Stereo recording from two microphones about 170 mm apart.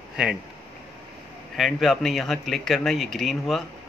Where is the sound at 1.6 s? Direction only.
Centre (ahead or behind).